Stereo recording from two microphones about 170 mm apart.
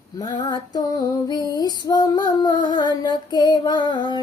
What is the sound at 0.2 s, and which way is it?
Female singing, 25° left (ahead or behind).